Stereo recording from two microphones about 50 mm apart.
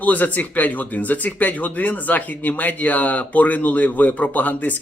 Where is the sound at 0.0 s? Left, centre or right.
Left.